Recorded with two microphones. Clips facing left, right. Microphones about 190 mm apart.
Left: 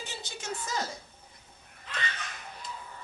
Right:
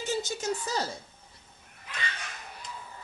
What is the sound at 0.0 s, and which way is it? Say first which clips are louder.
Speech: right 10 dB; 45° right (ahead or behind).